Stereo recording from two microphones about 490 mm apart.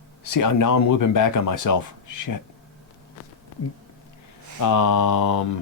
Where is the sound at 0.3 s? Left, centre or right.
Left.